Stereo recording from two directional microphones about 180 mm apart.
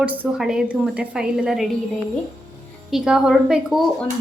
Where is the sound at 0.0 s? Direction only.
10° right (ahead or behind).